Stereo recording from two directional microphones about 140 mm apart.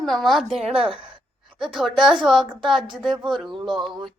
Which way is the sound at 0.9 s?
40° right (ahead or behind).